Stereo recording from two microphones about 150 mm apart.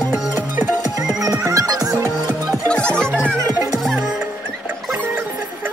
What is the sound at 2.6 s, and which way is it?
Music, 5° left (ahead or behind).